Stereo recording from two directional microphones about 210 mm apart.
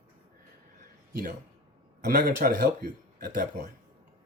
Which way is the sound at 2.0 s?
40° right (ahead or behind).